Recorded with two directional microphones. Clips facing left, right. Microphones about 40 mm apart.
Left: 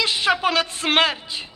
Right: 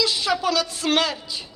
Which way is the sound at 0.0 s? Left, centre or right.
Left.